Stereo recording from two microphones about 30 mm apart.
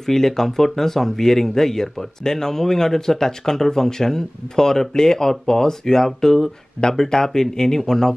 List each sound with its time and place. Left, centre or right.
0.0 s speech: centre